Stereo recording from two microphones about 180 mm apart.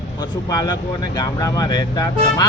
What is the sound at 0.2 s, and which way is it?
Speech, 20° left (ahead or behind).